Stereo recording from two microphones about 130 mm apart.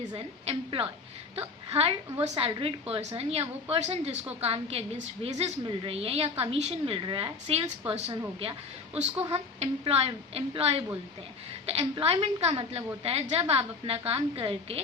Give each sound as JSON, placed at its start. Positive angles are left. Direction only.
{"t": 0.4, "sound": "a woman's voice", "side_deg": -45}